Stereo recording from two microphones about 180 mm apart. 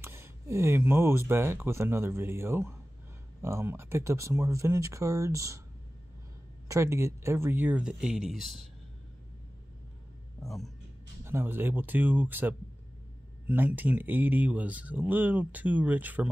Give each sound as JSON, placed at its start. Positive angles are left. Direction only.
{"t": 0.0, "sound": "speech", "side_deg": -15}
{"t": 6.7, "sound": "speech", "side_deg": -15}
{"t": 10.4, "sound": "speech", "side_deg": 0}
{"t": 11.2, "sound": "speech", "side_deg": -10}